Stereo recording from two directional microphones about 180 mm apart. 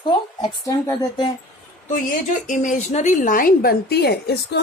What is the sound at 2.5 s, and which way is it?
A woman's voice, 45° left (ahead or behind).